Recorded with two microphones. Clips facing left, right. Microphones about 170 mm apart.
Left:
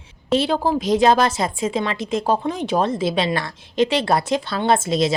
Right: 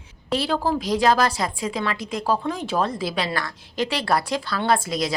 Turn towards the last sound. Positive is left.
turn(degrees=25)  # may be behind; listen again after turning